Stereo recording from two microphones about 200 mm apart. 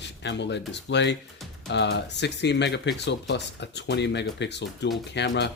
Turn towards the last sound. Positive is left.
turn(degrees=60)  # may be behind; listen again after turning